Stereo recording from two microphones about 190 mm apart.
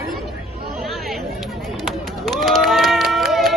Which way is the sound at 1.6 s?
Centre (ahead or behind).